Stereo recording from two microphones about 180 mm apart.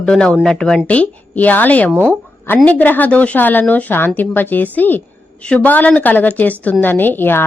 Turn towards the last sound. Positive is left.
turn(degrees=10)  # may be behind; listen again after turning